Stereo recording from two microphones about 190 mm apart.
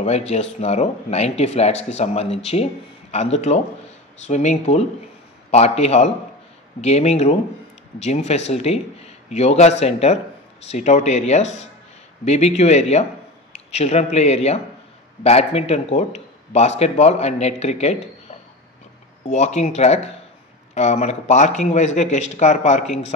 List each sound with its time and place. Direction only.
0.0 s speech: 35° left (ahead or behind)
19.2 s speech: 35° left (ahead or behind)